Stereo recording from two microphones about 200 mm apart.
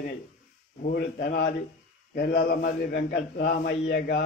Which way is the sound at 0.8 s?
45° left (ahead or behind).